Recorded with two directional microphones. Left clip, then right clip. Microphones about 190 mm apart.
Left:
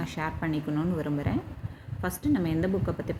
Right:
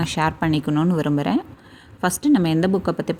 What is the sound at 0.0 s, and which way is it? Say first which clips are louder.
A woman's voice: right 11 dB; 55° right (ahead or behind).